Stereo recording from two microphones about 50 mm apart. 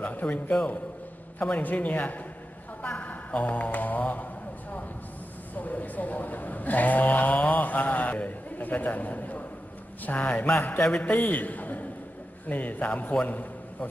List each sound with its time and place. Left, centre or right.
0.0 s a man's voice: left
1.4 s a man's voice: left
2.8 s mantra: left
5.5 s a man's voice: left
11.1 s a man's voice: left